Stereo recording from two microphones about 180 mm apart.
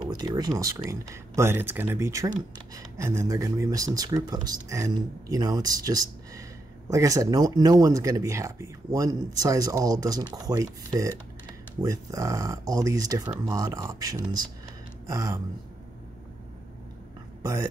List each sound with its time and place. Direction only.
0.1 s speech: 20° right (ahead or behind)
17.4 s speech: 20° right (ahead or behind)